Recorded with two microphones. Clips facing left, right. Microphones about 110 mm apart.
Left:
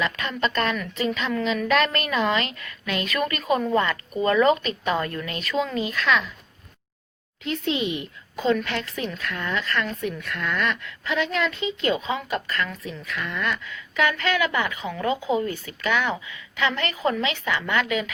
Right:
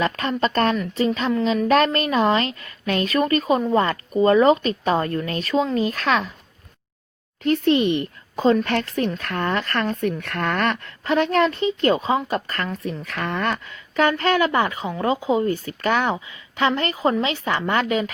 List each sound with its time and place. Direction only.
0.0 s a woman's voice: 35° right (ahead or behind)
7.4 s a woman's voice: 50° right (ahead or behind)
8.4 s speech: 45° right (ahead or behind)
15.5 s a woman's voice: 45° right (ahead or behind)